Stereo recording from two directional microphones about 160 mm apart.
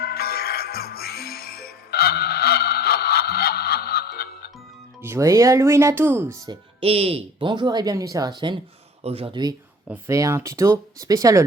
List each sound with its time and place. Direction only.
0.0 s music: 75° left (ahead or behind)
5.0 s speech: 15° right (ahead or behind)
6.5 s speech: 35° right (ahead or behind)